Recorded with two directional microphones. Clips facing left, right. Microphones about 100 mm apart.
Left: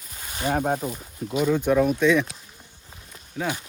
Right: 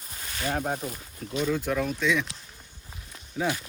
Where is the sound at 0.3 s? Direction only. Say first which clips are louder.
Left 5 dB; 20° left (ahead or behind).